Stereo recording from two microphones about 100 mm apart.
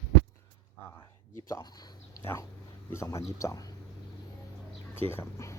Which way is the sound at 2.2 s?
25° left (ahead or behind).